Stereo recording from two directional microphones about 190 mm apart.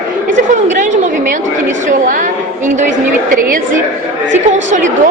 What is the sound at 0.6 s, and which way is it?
A woman's voice, 40° right (ahead or behind).